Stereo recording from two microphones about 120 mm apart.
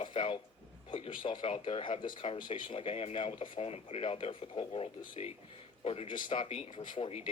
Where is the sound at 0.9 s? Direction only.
50° left (ahead or behind).